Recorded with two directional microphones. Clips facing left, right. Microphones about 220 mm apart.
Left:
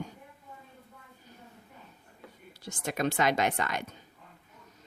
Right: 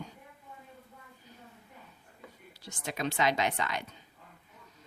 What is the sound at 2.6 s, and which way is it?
Speech, 50° left (ahead or behind).